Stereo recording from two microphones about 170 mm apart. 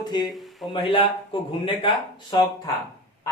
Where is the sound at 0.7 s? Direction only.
30° left (ahead or behind).